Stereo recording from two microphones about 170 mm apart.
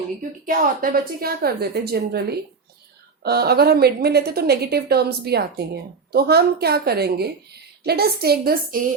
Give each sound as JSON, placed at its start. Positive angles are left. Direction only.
{"t": 0.2, "sound": "a woman's voice", "side_deg": -55}